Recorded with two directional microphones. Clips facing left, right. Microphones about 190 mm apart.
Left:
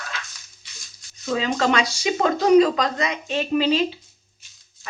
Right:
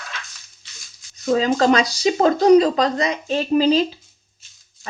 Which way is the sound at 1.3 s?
40° right (ahead or behind).